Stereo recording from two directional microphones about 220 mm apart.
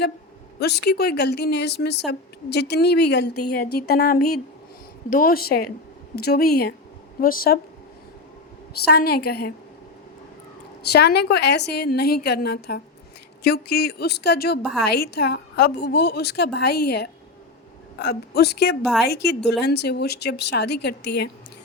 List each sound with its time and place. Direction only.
0.6 s speech: 50° left (ahead or behind)
8.9 s speech: 45° left (ahead or behind)
10.9 s speech: 50° left (ahead or behind)
14.6 s a woman's voice: centre (ahead or behind)
14.8 s speech: 50° left (ahead or behind)